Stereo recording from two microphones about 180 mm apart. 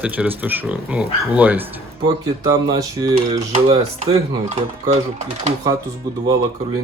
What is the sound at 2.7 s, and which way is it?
Speech, 20° right (ahead or behind).